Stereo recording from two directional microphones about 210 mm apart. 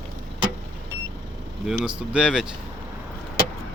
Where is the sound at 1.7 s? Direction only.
5° right (ahead or behind).